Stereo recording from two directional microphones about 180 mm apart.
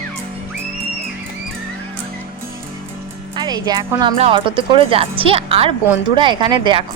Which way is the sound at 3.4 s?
25° right (ahead or behind).